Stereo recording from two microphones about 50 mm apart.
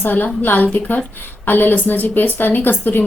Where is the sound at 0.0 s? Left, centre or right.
Left.